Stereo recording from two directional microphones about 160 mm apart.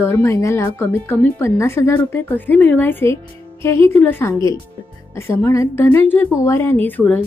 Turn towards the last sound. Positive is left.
turn(degrees=10)  # may be behind; listen again after turning